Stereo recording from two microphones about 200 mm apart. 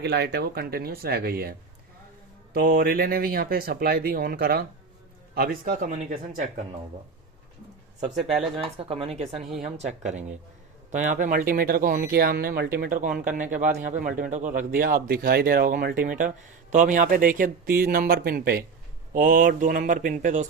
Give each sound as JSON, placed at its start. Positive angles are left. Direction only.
{"t": 0.0, "sound": "a man's voice", "side_deg": -55}
{"t": 8.1, "sound": "speech", "side_deg": 0}
{"t": 8.6, "sound": "a man's voice", "side_deg": -30}